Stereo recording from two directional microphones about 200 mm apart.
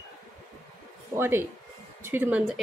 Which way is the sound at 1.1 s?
10° right (ahead or behind).